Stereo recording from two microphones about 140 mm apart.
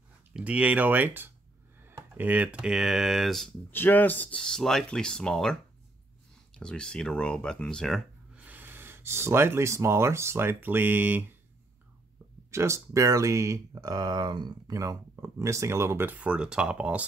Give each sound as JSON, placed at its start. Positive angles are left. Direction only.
{"t": 0.3, "sound": "speech", "side_deg": -10}
{"t": 3.7, "sound": "speech", "side_deg": 15}
{"t": 8.5, "sound": "speech", "side_deg": -15}
{"t": 12.4, "sound": "speech", "side_deg": -20}